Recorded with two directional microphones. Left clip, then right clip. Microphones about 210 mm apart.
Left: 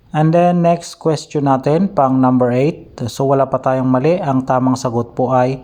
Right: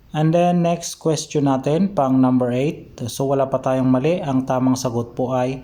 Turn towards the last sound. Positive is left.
turn(degrees=20)  # may be behind; listen again after turning